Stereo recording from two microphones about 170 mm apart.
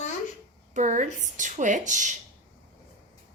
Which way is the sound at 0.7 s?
45° right (ahead or behind).